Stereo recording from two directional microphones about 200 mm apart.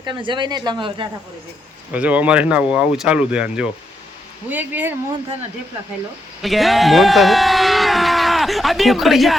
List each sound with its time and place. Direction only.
0.0 s speech: 25° right (ahead or behind)
1.9 s speech: 5° right (ahead or behind)
6.4 s speech: centre (ahead or behind)